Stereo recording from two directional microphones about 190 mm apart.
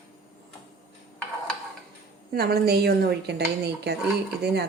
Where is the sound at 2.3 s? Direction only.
55° right (ahead or behind).